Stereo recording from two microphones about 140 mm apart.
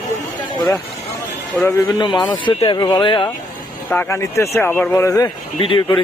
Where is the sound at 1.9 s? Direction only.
35° left (ahead or behind).